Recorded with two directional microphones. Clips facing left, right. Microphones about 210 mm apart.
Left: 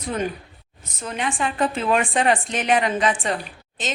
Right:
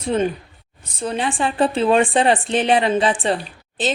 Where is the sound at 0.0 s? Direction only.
25° right (ahead or behind).